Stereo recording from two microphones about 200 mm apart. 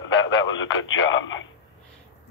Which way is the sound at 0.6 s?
75° left (ahead or behind).